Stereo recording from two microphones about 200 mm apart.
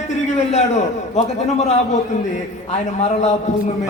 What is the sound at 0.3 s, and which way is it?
Speech, 35° left (ahead or behind).